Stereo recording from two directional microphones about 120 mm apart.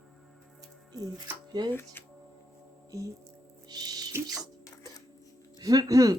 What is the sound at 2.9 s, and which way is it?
Music, 25° right (ahead or behind).